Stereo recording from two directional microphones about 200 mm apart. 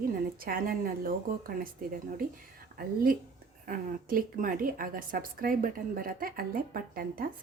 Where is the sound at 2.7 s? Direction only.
45° right (ahead or behind).